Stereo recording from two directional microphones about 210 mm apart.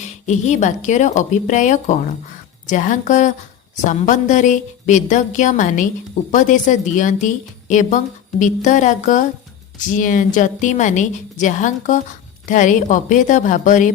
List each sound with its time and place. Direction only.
0.0 s speech: 35° left (ahead or behind)